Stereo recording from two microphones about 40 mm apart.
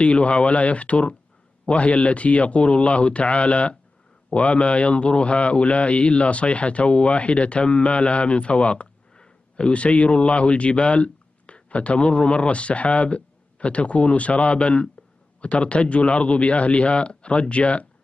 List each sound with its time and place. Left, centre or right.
0.0 s a man's voice: left